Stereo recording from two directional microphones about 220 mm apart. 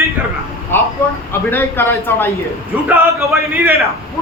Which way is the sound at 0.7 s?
10° left (ahead or behind).